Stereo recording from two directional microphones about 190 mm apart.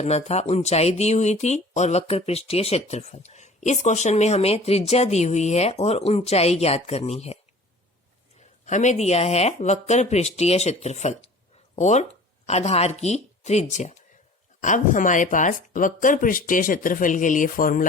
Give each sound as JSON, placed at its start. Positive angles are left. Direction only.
{"t": 0.0, "sound": "speech", "side_deg": 35}
{"t": 8.6, "sound": "speech", "side_deg": 40}